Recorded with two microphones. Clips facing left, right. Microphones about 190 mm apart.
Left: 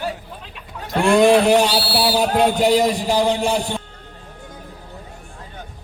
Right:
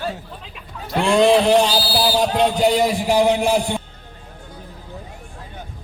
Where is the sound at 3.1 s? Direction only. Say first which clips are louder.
Right 2 dB; 15° right (ahead or behind).